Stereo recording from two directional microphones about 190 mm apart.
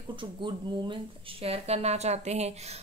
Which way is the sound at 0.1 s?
25° right (ahead or behind).